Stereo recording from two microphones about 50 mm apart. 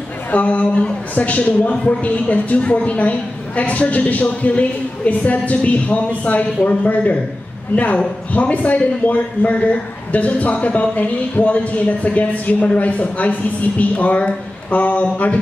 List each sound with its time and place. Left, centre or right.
0.3 s a woman's voice: left